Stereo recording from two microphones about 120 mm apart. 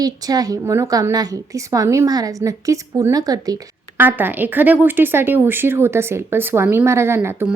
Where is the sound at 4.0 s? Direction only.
15° right (ahead or behind).